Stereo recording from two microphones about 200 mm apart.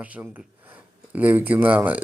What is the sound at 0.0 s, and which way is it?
Speech, 5° right (ahead or behind).